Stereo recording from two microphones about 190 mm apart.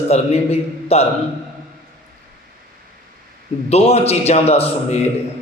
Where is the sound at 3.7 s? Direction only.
35° left (ahead or behind).